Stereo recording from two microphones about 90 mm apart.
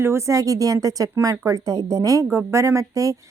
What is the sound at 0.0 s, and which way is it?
A woman's voice, 30° right (ahead or behind).